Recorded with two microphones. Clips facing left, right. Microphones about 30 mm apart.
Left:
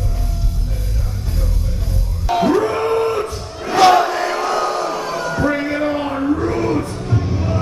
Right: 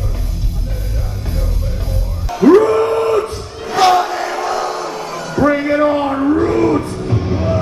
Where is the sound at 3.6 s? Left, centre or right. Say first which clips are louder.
Left 1 dB; centre.